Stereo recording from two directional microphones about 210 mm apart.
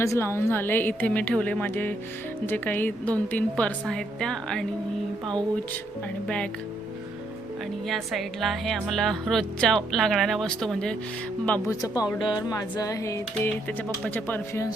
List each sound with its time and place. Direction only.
0.0 s speech: 15° left (ahead or behind)
5.2 s speech: 20° right (ahead or behind)
6.2 s speech: 5° left (ahead or behind)
7.9 s speech: centre (ahead or behind)